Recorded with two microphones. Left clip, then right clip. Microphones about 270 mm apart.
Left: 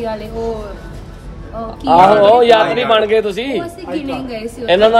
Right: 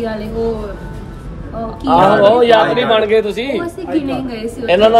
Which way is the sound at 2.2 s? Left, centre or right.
Left.